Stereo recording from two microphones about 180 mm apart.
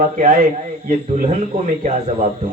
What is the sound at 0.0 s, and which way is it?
Speech, 50° right (ahead or behind).